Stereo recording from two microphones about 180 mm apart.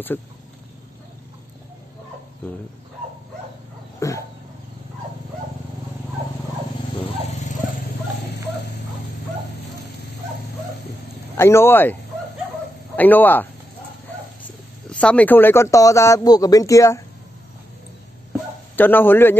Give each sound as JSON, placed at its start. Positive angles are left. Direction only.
{"t": 4.0, "sound": "speech", "side_deg": 15}
{"t": 11.3, "sound": "speech", "side_deg": 15}
{"t": 14.9, "sound": "speech", "side_deg": 5}
{"t": 18.8, "sound": "speech", "side_deg": 10}